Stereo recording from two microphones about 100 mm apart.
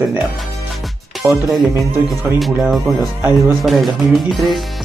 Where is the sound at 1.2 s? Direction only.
25° right (ahead or behind).